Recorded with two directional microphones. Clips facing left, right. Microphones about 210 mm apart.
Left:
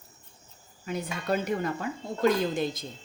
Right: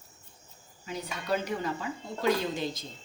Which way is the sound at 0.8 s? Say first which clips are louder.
Left 5 dB; 50° left (ahead or behind).